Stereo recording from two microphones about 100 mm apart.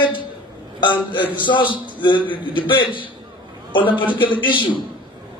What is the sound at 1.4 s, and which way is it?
A man's voice, 55° left (ahead or behind).